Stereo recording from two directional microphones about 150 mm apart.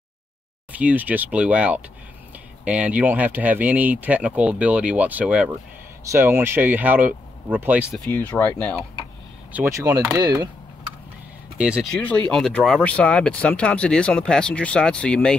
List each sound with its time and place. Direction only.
0.7 s speech: 10° right (ahead or behind)
8.1 s speech: 15° left (ahead or behind)
10.1 s speech: 25° right (ahead or behind)
11.5 s speech: 5° right (ahead or behind)